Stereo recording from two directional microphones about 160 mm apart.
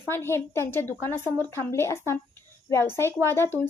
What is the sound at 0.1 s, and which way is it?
A woman's voice, 15° left (ahead or behind).